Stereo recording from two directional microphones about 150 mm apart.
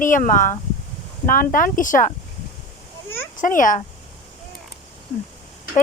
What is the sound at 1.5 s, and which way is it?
Speech, 65° left (ahead or behind).